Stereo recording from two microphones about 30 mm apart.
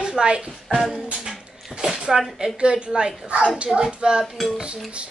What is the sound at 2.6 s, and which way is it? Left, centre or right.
Speech, right.